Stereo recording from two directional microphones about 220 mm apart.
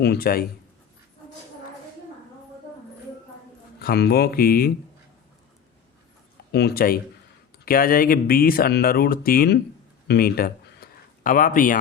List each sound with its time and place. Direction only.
0.0 s speech: 45° left (ahead or behind)
3.8 s speech: 45° left (ahead or behind)
6.5 s speech: 45° left (ahead or behind)
10.1 s a sound: 45° left (ahead or behind)